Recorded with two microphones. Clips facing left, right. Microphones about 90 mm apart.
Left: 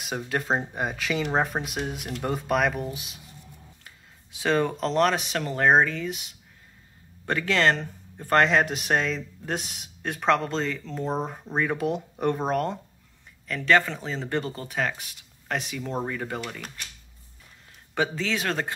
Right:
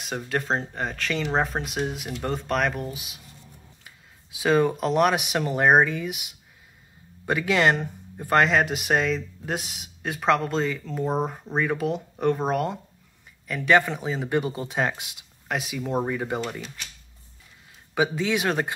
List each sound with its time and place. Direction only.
0.3 s speech: centre (ahead or behind)
13.5 s speech: 15° right (ahead or behind)
15.4 s speech: 5° right (ahead or behind)
17.9 s speech: 15° right (ahead or behind)